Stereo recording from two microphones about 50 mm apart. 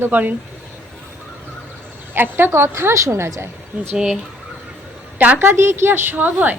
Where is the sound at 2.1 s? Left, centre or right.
Right.